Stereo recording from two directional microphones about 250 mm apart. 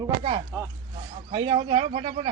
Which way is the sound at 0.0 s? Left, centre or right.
Right.